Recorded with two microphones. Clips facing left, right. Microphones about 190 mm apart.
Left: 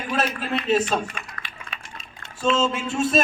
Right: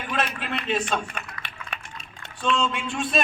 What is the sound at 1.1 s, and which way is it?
Typing, 60° right (ahead or behind).